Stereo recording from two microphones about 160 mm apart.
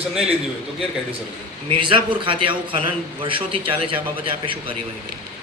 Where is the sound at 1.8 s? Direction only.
35° right (ahead or behind).